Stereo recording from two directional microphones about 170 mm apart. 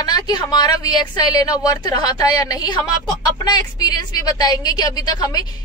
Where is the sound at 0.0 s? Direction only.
25° left (ahead or behind).